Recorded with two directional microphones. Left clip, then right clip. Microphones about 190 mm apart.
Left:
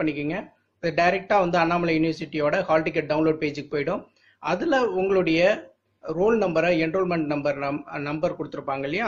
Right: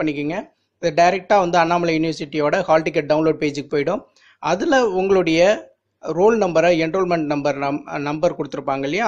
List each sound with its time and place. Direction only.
0.0 s a man's voice: 40° right (ahead or behind)